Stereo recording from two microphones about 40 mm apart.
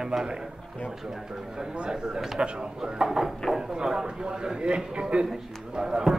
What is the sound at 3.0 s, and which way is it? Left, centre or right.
Speech, centre.